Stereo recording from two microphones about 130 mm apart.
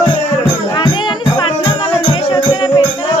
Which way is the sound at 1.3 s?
40° left (ahead or behind).